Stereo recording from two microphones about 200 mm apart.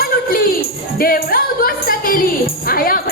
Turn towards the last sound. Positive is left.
turn(degrees=45)  # may be behind; listen again after turning